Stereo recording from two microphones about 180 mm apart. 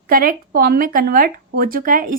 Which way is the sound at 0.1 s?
55° right (ahead or behind).